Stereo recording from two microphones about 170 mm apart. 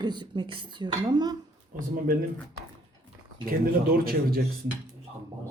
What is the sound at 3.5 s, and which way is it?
Speech, 60° right (ahead or behind).